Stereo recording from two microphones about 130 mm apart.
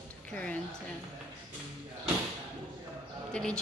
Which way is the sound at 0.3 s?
10° left (ahead or behind).